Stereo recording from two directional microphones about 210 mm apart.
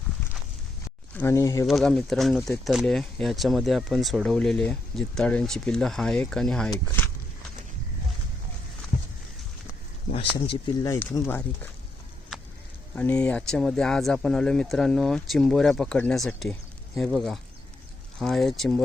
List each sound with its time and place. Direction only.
1.1 s speech: 10° left (ahead or behind)
1.6 s speech: centre (ahead or behind)
10.1 s a sound: 25° left (ahead or behind)
10.8 s speech: 15° left (ahead or behind)
13.0 s speech: 5° left (ahead or behind)